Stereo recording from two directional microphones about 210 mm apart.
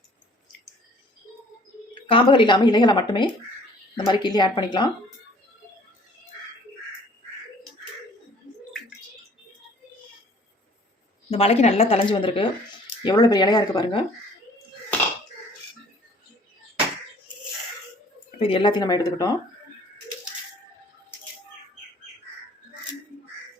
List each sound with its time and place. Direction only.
2.0 s a woman's voice: 25° left (ahead or behind)
11.3 s a woman's voice: 30° left (ahead or behind)
18.3 s a woman's voice: 25° left (ahead or behind)